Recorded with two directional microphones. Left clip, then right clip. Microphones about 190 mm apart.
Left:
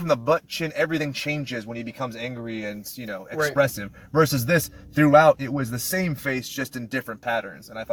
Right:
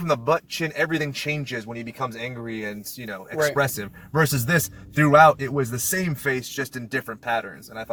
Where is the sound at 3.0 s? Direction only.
15° left (ahead or behind).